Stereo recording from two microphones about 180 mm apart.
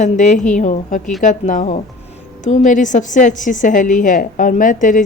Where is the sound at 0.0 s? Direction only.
45° left (ahead or behind).